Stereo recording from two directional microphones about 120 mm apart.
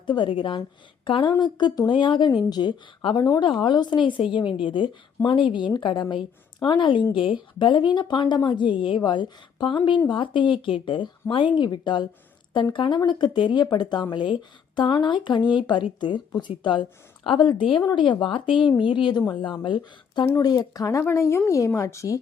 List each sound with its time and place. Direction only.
0.0 s a woman's voice: 40° left (ahead or behind); by 22.2 s 25° left (ahead or behind)